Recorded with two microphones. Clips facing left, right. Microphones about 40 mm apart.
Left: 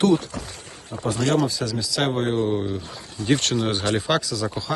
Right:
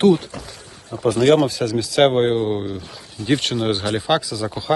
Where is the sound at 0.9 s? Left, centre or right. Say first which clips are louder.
Right 5 dB; left.